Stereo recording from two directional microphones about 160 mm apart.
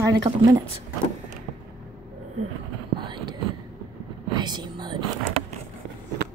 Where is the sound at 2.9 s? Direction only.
30° right (ahead or behind).